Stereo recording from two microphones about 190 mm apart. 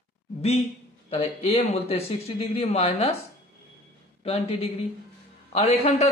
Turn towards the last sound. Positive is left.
turn(degrees=35)  # may be behind; listen again after turning